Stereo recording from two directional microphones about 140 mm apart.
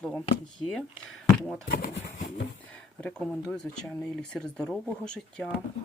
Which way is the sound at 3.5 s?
5° left (ahead or behind).